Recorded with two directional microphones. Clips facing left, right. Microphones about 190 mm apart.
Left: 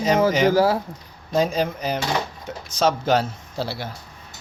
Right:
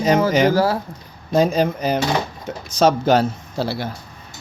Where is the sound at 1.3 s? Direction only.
55° right (ahead or behind).